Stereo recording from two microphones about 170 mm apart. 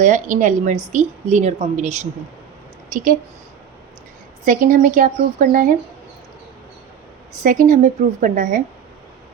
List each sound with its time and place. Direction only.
0.0 s speech: 50° right (ahead or behind)
2.9 s speech: 55° right (ahead or behind)
4.4 s speech: 50° right (ahead or behind)
7.4 s speech: 50° right (ahead or behind)